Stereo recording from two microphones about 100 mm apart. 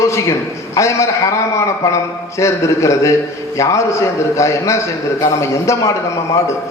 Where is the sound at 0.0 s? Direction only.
30° left (ahead or behind).